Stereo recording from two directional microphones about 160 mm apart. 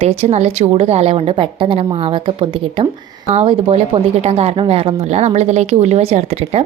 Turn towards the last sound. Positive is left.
turn(degrees=-40)  # may be behind; listen again after turning